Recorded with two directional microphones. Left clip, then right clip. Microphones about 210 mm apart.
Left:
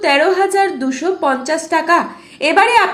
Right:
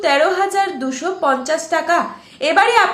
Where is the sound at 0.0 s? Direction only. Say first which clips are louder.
Left 2 dB; 10° left (ahead or behind).